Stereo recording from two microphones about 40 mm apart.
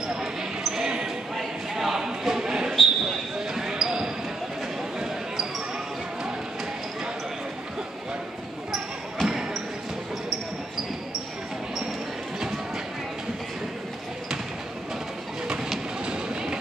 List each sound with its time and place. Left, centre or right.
0.1 s basketball bounce: centre
1.3 s a sound: centre
2.7 s basketball bounce: centre
3.3 s basketball bounce: centre
8.7 s basketball bounce: centre